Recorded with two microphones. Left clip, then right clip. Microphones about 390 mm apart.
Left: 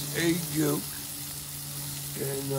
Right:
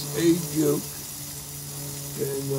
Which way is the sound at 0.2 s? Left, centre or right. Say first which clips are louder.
Right 5 dB; centre.